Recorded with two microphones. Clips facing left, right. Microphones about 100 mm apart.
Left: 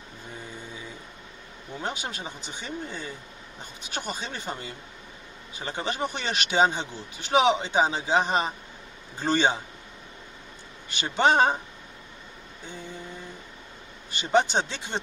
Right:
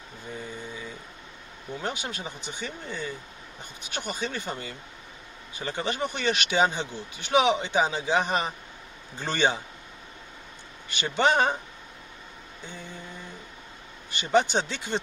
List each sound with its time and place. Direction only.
1.8 s a man's voice: 30° left (ahead or behind)
10.9 s a man's voice: 30° left (ahead or behind)
14.1 s speech: 30° left (ahead or behind)